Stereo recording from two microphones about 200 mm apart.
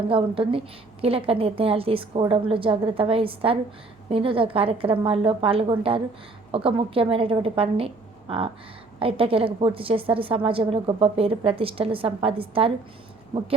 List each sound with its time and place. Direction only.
0.1 s a woman's voice: 25° right (ahead or behind)